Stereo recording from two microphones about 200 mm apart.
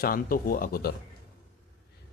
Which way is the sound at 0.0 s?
45° left (ahead or behind).